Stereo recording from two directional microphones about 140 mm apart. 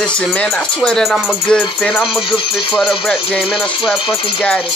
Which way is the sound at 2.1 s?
40° left (ahead or behind).